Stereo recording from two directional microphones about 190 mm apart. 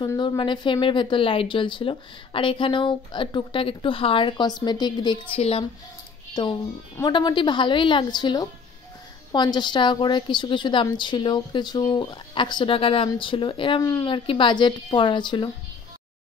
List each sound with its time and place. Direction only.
0.0 s a woman's voice: 25° left (ahead or behind)
7.0 s a woman's voice: 25° left (ahead or behind)